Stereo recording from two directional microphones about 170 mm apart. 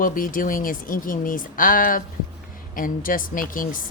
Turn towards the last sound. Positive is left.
turn(degrees=55)  # may be behind; listen again after turning